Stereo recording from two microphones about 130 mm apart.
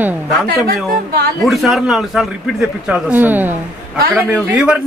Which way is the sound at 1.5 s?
Centre (ahead or behind).